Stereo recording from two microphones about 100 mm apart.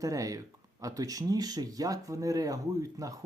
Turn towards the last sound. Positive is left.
turn(degrees=-35)  # may be behind; listen again after turning